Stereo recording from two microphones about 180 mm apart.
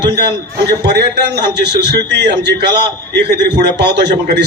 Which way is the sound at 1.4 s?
65° right (ahead or behind).